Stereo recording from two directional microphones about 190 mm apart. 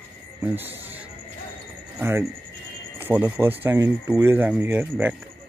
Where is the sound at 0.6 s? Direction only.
10° right (ahead or behind).